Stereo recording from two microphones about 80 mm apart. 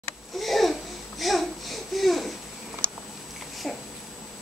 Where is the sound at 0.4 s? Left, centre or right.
Centre.